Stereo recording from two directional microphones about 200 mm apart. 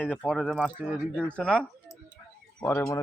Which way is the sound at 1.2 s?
5° left (ahead or behind).